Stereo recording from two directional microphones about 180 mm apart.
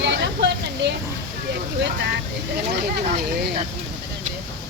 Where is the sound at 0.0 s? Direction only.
75° right (ahead or behind).